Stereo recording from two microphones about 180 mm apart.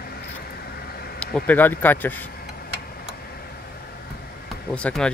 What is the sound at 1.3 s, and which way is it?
Speech, 10° left (ahead or behind).